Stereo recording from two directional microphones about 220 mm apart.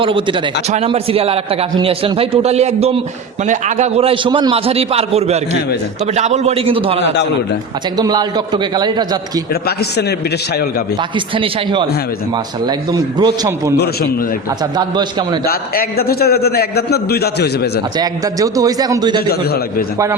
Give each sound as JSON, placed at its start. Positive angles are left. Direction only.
{"t": 0.0, "sound": "a man's voice", "side_deg": -25}
{"t": 7.0, "sound": "a man's voice", "side_deg": 50}
{"t": 7.9, "sound": "a man's voice", "side_deg": -20}
{"t": 11.3, "sound": "a man's voice", "side_deg": -20}
{"t": 13.7, "sound": "a man's voice", "side_deg": 50}
{"t": 14.8, "sound": "a man's voice", "side_deg": -20}
{"t": 15.4, "sound": "a man's voice", "side_deg": 45}
{"t": 17.9, "sound": "a man's voice", "side_deg": -15}